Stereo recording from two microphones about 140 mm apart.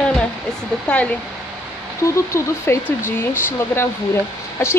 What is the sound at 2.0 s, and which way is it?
Speech, 20° left (ahead or behind).